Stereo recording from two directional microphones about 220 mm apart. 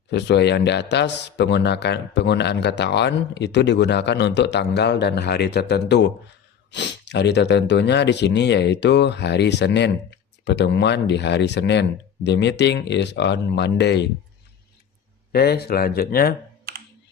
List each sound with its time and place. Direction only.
0.1 s speech: 50° left (ahead or behind)
15.3 s speech: 45° left (ahead or behind)
16.7 s computer keyboard: 45° right (ahead or behind)